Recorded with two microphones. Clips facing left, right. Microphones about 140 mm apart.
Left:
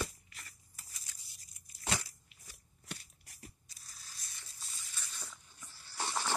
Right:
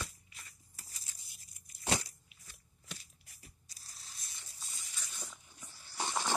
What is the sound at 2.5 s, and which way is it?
Shuffling cards, 65° left (ahead or behind).